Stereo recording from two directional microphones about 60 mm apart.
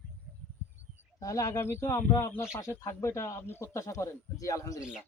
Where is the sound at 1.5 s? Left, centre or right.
Left.